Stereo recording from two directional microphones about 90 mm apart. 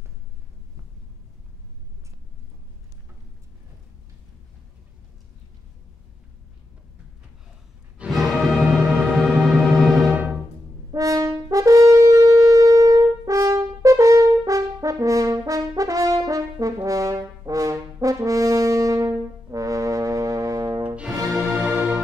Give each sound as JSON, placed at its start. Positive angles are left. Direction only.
{"t": 8.1, "sound": "music", "side_deg": 0}
{"t": 10.9, "sound": "brass instrument", "side_deg": -40}
{"t": 20.9, "sound": "music", "side_deg": -15}
{"t": 21.3, "sound": "music", "side_deg": 0}